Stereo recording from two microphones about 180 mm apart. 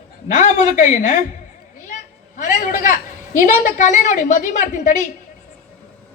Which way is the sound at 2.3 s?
45° left (ahead or behind).